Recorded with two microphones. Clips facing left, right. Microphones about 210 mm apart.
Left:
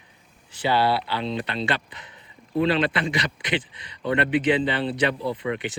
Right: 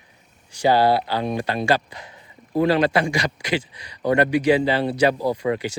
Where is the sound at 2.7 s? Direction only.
20° left (ahead or behind).